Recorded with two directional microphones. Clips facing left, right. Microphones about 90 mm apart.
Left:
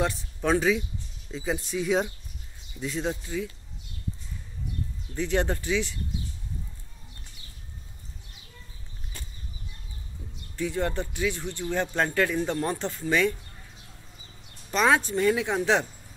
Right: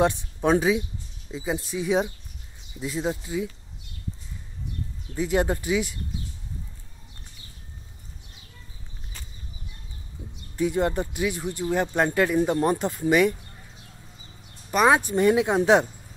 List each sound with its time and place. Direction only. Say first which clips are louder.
0.0 s speech: right 5 dB; 20° right (ahead or behind)
5.1 s speech: right 3 dB; 10° right (ahead or behind)
10.5 s speech: right 5 dB; 15° right (ahead or behind)
14.7 s speech: right 3 dB; 10° right (ahead or behind)